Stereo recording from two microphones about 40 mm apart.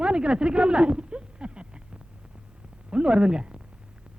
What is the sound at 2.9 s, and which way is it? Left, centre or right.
Speech, right.